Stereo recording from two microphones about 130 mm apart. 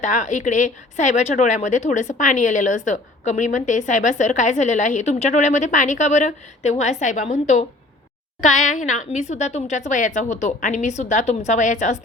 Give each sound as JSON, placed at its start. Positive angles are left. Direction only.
{"t": 0.0, "sound": "a woman's voice", "side_deg": 65}